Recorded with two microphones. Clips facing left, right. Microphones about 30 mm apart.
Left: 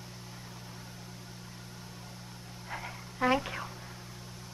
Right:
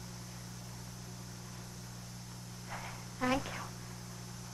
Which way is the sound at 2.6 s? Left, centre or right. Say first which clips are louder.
Left 4 dB; left.